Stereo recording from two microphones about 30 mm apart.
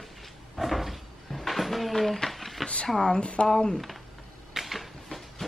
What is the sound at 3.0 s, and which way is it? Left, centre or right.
Speech, left.